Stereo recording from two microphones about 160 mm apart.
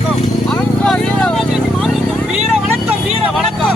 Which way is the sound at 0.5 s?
5° left (ahead or behind).